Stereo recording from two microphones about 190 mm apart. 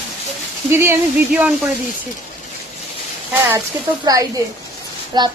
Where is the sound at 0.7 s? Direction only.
10° right (ahead or behind).